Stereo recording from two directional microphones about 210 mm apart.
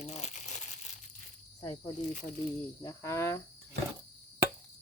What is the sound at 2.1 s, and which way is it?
Speech, 40° left (ahead or behind).